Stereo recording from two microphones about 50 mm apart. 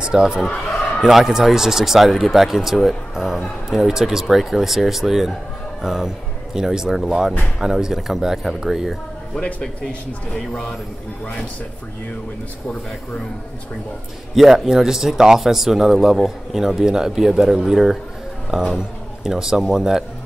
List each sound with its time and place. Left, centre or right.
0.0 s speech: centre
9.3 s speech: centre
14.3 s a man's voice: centre